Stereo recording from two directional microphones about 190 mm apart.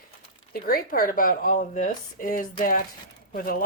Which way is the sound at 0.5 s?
50° left (ahead or behind).